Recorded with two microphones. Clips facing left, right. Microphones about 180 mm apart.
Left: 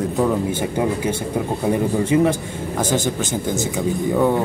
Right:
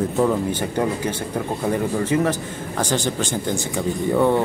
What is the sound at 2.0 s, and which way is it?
Speech, 15° left (ahead or behind).